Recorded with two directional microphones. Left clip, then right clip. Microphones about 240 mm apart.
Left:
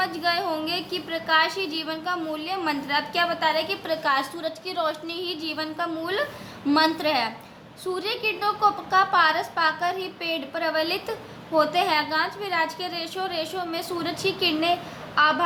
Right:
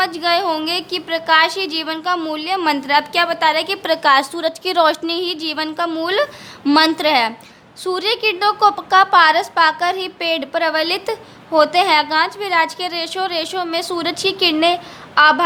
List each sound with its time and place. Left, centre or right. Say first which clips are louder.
0.0 s a woman's voice: right 8 dB; right